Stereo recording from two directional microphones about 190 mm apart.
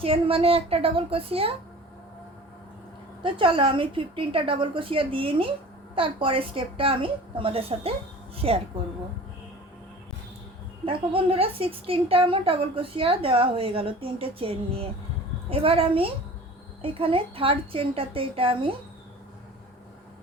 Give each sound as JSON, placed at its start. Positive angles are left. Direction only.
{"t": 0.0, "sound": "a woman's voice", "side_deg": -30}
{"t": 3.2, "sound": "a woman's voice", "side_deg": -25}
{"t": 10.8, "sound": "a woman's voice", "side_deg": -30}